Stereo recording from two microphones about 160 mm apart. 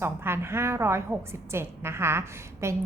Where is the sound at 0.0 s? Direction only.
15° right (ahead or behind).